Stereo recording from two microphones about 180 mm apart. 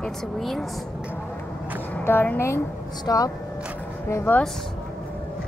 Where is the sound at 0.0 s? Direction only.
Centre (ahead or behind).